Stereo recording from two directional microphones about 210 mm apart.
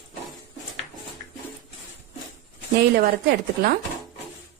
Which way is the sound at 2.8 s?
50° right (ahead or behind).